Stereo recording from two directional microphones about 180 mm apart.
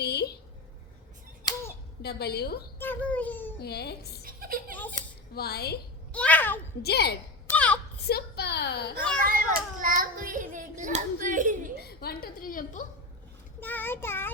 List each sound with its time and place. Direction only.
0.0 s a sound: 65° left (ahead or behind)
2.0 s a woman's voice: 65° left (ahead or behind)
2.7 s a child's voice: 10° left (ahead or behind)
3.6 s a woman's voice: 60° left (ahead or behind)
4.2 s chuckle: 50° right (ahead or behind)
5.3 s a woman's voice: 60° left (ahead or behind)
6.1 s a child's voice: 10° left (ahead or behind)
6.8 s a woman's voice: 65° left (ahead or behind)
7.4 s a sound: 10° left (ahead or behind)
8.0 s a woman's voice: 60° left (ahead or behind)
9.2 s a child's voice: 50° right (ahead or behind)
11.8 s a woman's voice: 60° left (ahead or behind)
13.6 s a child's voice: 10° left (ahead or behind)